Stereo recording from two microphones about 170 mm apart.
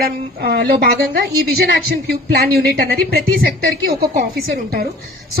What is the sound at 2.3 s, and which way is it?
A woman's voice, 65° right (ahead or behind).